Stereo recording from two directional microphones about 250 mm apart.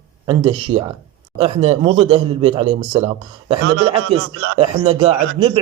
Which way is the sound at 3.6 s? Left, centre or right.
Right.